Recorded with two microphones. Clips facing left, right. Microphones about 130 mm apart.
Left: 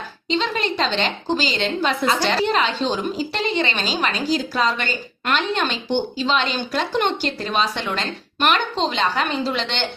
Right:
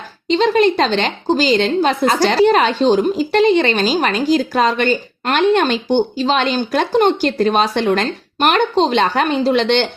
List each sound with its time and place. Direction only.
0.3 s a woman's voice: 45° right (ahead or behind)